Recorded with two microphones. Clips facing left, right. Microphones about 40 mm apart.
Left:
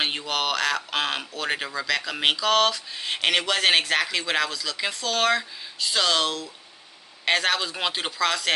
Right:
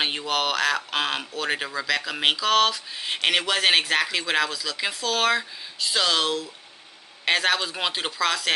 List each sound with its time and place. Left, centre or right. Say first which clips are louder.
0.0 s speech: right 1 dB; centre